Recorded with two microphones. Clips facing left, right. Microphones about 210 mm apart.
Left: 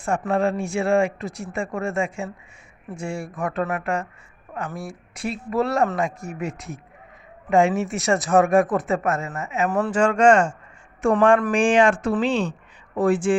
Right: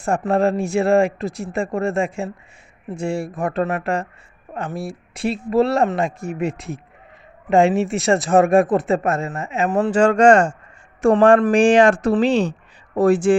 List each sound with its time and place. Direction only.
0.0 s speech: 40° right (ahead or behind)